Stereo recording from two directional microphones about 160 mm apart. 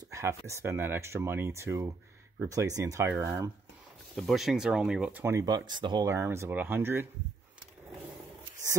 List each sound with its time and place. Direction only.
0.1 s a sound: 20° right (ahead or behind)
0.5 s speech: 15° right (ahead or behind)
4.1 s speech: centre (ahead or behind); by 7.1 s 15° right (ahead or behind)